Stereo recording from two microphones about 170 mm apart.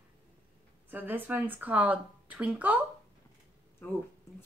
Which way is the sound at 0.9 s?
10° right (ahead or behind).